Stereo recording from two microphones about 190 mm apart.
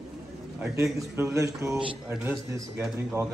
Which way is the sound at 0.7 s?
15° right (ahead or behind).